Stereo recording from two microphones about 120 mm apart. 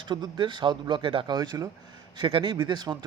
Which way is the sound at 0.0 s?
40° right (ahead or behind).